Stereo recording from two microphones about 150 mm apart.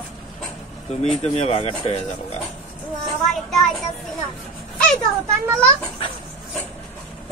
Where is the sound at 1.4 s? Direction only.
40° left (ahead or behind).